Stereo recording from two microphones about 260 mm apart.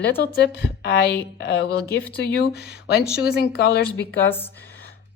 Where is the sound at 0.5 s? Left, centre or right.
Left.